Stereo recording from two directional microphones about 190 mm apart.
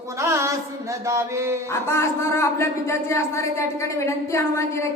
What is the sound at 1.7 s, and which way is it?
A man's voice, 15° left (ahead or behind).